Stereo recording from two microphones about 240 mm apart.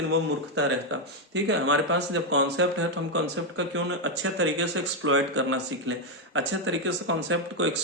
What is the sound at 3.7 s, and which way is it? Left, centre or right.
Speech, right.